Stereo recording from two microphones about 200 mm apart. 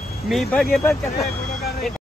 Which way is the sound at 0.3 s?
Centre (ahead or behind).